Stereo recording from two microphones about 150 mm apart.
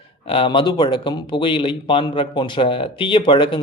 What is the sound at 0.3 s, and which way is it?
Speech, 35° left (ahead or behind).